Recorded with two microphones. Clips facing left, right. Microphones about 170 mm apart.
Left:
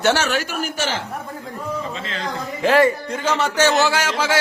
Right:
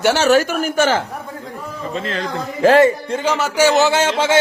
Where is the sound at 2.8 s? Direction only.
25° right (ahead or behind).